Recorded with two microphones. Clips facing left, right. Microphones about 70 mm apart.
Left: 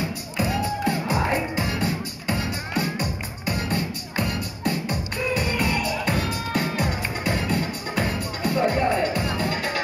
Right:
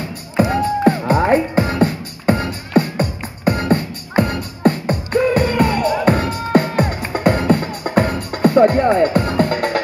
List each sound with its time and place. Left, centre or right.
0.4 s music: right